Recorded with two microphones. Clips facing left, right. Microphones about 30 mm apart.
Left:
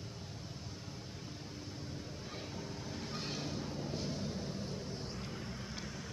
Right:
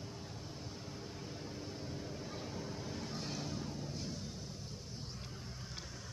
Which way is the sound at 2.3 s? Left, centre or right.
Centre.